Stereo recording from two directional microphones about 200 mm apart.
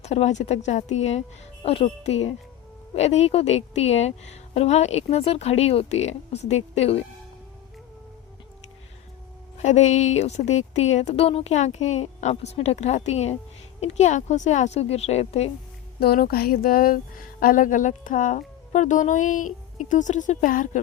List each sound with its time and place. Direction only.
0.0 s speech: 35° left (ahead or behind)
9.6 s speech: 35° left (ahead or behind)
16.0 s speech: 50° left (ahead or behind)